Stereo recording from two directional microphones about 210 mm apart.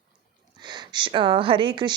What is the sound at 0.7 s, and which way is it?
Speech, 20° right (ahead or behind).